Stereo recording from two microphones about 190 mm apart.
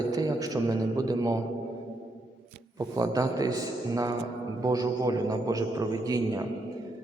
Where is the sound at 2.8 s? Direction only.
20° right (ahead or behind).